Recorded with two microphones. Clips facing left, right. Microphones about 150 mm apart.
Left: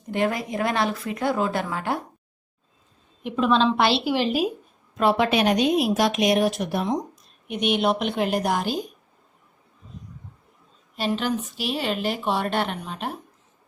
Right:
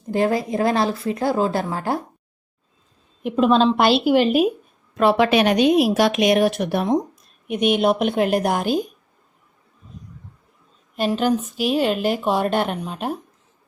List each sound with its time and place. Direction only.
0.1 s speech: 35° right (ahead or behind)
3.2 s a woman's voice: 40° right (ahead or behind); by 4.5 s 60° right (ahead or behind)
4.9 s speech: 80° right; by 7.0 s 60° right (ahead or behind)
7.4 s a woman's voice: 50° right (ahead or behind)
10.9 s a woman's voice: 45° right (ahead or behind)